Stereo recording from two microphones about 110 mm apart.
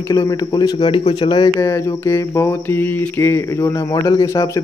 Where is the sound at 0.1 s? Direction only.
30° left (ahead or behind).